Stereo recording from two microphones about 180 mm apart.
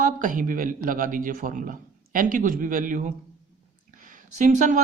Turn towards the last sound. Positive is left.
turn(degrees=-45)  # may be behind; listen again after turning